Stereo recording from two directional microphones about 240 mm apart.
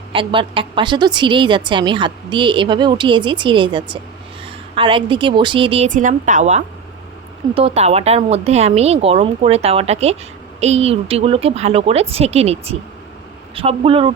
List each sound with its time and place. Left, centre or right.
0.1 s a woman's voice: right